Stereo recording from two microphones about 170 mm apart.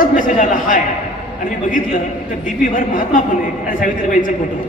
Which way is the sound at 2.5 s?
55° left (ahead or behind).